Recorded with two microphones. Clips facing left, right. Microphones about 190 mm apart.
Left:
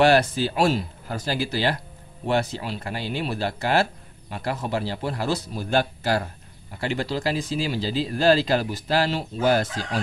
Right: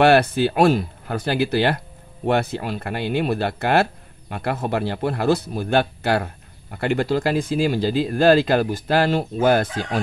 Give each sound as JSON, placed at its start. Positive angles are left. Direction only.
{"t": 0.0, "sound": "speech", "side_deg": -60}